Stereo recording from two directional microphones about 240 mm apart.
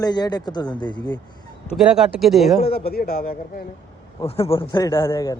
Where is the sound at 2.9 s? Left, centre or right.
Left.